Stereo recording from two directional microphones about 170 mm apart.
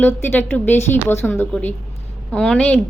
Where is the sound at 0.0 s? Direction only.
10° left (ahead or behind).